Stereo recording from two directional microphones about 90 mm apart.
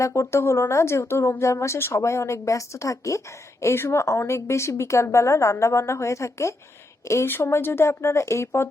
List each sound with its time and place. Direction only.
0.0 s a woman's voice: 30° left (ahead or behind)